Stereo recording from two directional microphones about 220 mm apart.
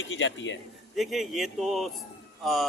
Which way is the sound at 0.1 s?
55° left (ahead or behind).